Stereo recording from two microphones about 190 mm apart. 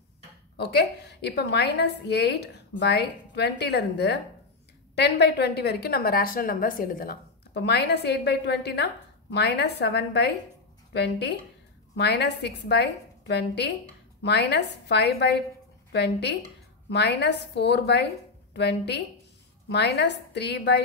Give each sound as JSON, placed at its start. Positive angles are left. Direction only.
{"t": 0.6, "sound": "a woman's voice", "side_deg": 60}